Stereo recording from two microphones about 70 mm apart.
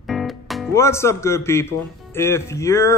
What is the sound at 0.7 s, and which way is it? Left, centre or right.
A man's voice, left.